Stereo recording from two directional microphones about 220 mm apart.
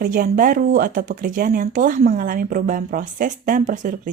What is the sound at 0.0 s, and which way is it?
Speech, 40° right (ahead or behind).